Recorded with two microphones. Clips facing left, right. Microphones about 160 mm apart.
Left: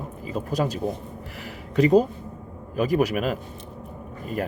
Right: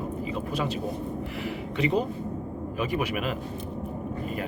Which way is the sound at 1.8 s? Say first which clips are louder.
Left 8 dB; 40° left (ahead or behind).